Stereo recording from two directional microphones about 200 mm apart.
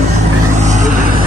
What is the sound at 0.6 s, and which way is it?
Vehicle, 35° right (ahead or behind).